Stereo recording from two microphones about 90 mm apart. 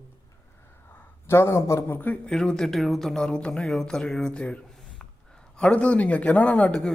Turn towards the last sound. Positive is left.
turn(degrees=10)  # may be behind; listen again after turning